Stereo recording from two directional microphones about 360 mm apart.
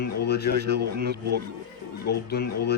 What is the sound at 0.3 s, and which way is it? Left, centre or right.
Speech, left.